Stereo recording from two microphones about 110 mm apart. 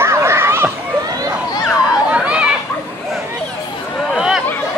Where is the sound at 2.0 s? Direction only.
10° right (ahead or behind).